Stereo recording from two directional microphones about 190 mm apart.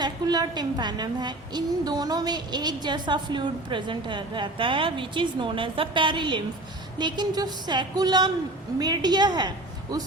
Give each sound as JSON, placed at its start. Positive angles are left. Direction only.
{"t": 0.0, "sound": "a woman's voice", "side_deg": -20}